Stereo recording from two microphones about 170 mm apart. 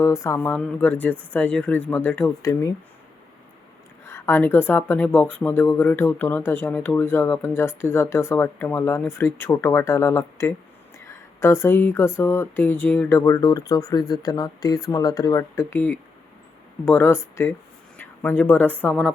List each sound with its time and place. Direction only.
0.0 s speech: 15° left (ahead or behind)
4.0 s speech: 15° left (ahead or behind)